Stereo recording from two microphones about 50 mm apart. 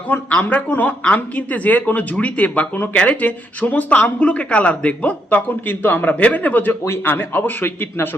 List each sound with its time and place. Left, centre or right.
0.3 s speech: left
2.9 s speech: left
6.1 s speech: left
6.8 s speech: left